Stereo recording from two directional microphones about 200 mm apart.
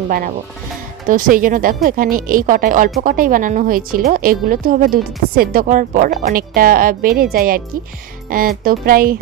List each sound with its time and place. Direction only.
1.0 s a woman's voice: 40° right (ahead or behind)